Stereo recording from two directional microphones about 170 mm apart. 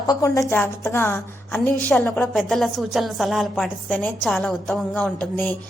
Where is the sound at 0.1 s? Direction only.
20° left (ahead or behind).